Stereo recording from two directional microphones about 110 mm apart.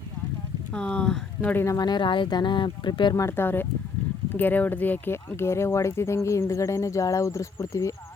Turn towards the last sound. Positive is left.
turn(degrees=30)  # may be behind; listen again after turning